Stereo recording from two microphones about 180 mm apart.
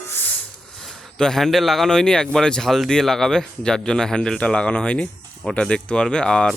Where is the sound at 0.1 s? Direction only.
10° left (ahead or behind).